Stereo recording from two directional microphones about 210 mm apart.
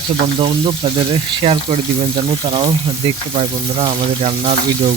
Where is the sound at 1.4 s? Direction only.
25° right (ahead or behind).